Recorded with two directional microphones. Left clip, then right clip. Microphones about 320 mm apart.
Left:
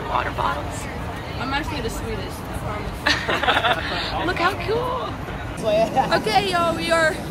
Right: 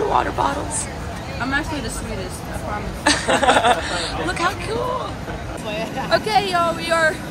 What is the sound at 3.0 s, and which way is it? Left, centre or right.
Speech, centre.